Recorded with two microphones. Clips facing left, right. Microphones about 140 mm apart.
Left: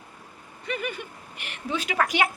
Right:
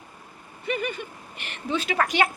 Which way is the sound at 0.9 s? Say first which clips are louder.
Right 1 dB; 10° left (ahead or behind).